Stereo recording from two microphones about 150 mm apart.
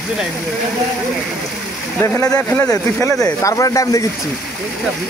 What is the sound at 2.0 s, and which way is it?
Speech, 15° left (ahead or behind).